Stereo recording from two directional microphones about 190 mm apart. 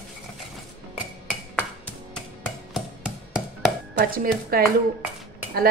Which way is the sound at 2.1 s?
5° left (ahead or behind).